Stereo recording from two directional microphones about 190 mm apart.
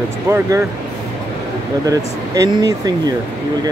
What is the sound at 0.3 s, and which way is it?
Speech, 15° right (ahead or behind).